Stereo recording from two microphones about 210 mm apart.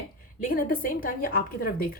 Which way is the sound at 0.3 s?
40° left (ahead or behind).